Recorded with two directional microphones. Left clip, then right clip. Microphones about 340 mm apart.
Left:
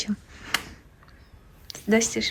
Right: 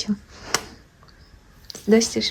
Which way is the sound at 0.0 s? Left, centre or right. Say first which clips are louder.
Right 3 dB; centre.